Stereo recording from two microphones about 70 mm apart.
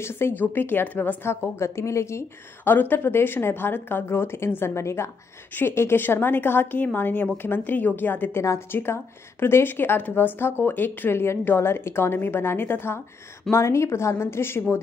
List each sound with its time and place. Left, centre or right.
0.0 s a woman's voice: left
1.3 s a woman's voice: left